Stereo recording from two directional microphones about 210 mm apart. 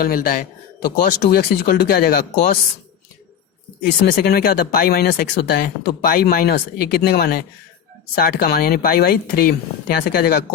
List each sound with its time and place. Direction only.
0.0 s speech: 40° left (ahead or behind)
4.0 s speech: 45° left (ahead or behind)